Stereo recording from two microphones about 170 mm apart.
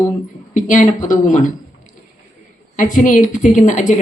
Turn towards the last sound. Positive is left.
turn(degrees=50)  # may be behind; listen again after turning